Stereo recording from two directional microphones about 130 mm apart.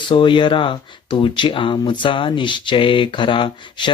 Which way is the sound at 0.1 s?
40° left (ahead or behind).